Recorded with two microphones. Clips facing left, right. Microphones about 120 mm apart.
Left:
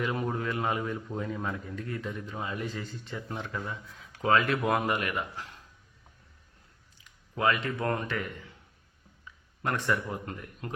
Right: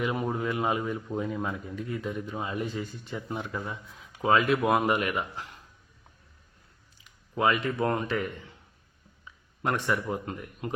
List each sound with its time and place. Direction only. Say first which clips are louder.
0.0 s speech: right 2 dB; 10° right (ahead or behind)
7.0 s speech: right 2 dB; 20° right (ahead or behind)